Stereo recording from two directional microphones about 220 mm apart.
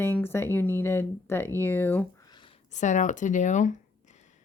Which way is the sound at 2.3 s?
25° left (ahead or behind).